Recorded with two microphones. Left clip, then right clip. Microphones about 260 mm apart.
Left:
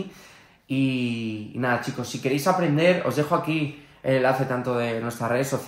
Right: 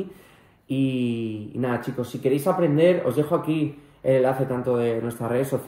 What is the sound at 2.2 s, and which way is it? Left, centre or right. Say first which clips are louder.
Speech: right 1 dB; left.